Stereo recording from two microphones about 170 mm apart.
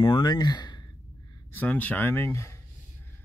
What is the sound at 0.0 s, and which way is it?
Speech, 25° left (ahead or behind).